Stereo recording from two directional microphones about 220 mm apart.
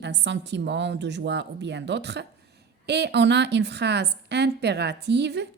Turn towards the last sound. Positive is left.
turn(degrees=-50)  # may be behind; listen again after turning